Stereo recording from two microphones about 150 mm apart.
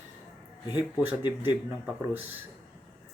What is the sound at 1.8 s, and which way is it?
Speech, 15° right (ahead or behind).